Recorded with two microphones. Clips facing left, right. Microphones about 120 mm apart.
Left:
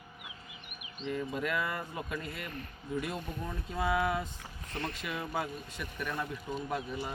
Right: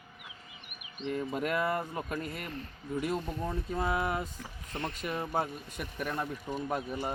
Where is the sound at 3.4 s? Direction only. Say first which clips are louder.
Right 2 dB; 35° right (ahead or behind).